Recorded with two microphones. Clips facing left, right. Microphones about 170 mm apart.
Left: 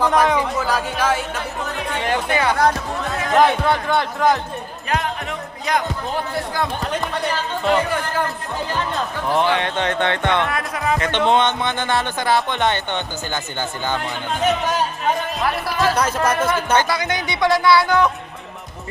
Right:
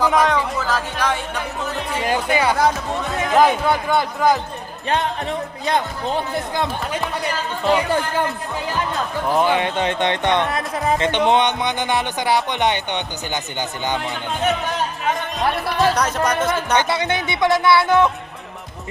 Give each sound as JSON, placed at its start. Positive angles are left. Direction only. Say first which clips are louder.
{"t": 0.0, "sound": "speech", "louder": "even", "side_deg": 0}
{"t": 0.3, "sound": "speech", "louder": "left 1 dB", "side_deg": 10}
{"t": 1.9, "sound": "a man's voice", "louder": "right 1 dB", "side_deg": -10}
{"t": 6.3, "sound": "speech", "louder": "even", "side_deg": -20}
{"t": 9.3, "sound": "speech", "louder": "right 1 dB", "side_deg": -10}
{"t": 14.0, "sound": "a man's voice", "louder": "left 1 dB", "side_deg": 0}
{"t": 16.7, "sound": "speech", "louder": "even", "side_deg": -25}